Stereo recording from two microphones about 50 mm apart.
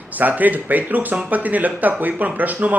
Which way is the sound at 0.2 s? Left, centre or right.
Right.